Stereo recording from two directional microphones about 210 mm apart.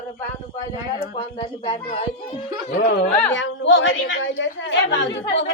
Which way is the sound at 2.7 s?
50° left (ahead or behind).